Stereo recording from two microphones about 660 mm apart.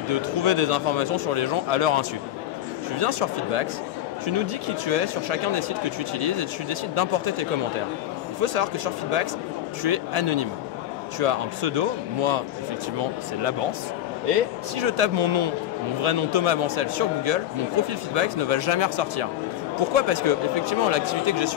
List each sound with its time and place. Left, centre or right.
0.1 s speech: right
14.8 s speech: right